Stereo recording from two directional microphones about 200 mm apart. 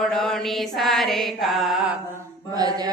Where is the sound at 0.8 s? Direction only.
Centre (ahead or behind).